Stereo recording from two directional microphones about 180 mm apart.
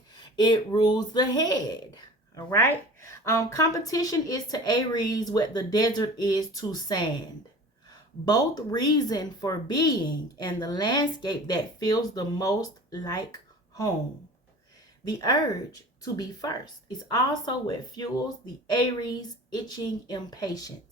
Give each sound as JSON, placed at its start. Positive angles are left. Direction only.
{"t": 0.2, "sound": "speech", "side_deg": 25}
{"t": 8.2, "sound": "speech", "side_deg": 20}
{"t": 15.0, "sound": "speech", "side_deg": 20}